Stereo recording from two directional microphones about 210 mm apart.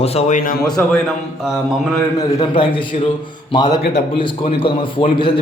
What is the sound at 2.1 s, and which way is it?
A man's voice, 25° left (ahead or behind).